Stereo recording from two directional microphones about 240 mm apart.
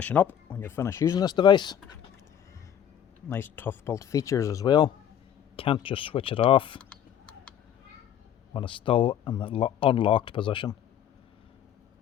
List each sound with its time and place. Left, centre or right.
0.0 s speech: centre
3.2 s speech: centre
6.9 s a sound: centre
8.5 s speech: left